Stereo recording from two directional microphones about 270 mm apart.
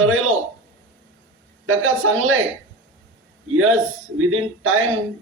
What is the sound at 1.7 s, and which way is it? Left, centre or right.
Speech, right.